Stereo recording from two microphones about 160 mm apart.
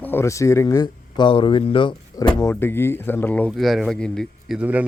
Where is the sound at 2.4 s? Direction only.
20° left (ahead or behind).